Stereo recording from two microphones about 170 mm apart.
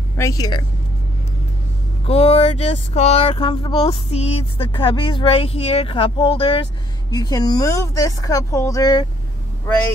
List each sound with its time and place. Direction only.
0.2 s speech: 20° left (ahead or behind)
2.0 s speech: 35° left (ahead or behind)